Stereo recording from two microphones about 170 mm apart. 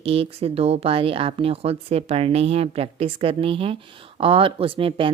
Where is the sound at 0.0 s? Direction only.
35° right (ahead or behind).